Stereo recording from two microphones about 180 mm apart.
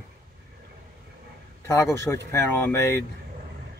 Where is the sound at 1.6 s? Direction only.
15° left (ahead or behind).